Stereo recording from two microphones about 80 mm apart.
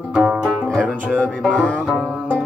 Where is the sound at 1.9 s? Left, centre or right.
Centre.